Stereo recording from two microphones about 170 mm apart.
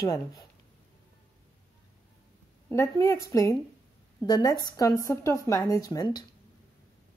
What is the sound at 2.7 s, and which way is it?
Speech, 20° left (ahead or behind).